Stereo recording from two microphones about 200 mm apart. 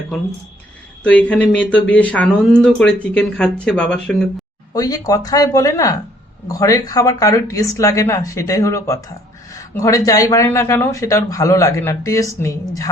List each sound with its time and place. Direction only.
1.0 s speech: 5° left (ahead or behind)
4.7 s a man's voice: 20° left (ahead or behind)